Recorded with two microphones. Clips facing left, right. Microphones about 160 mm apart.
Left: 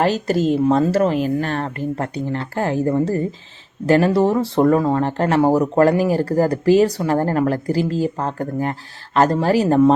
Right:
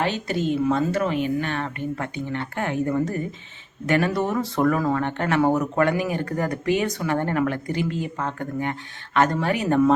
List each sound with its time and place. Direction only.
0.0 s speech: 40° left (ahead or behind)